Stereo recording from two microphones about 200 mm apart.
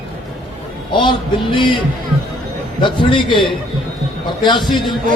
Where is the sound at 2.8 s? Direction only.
25° left (ahead or behind).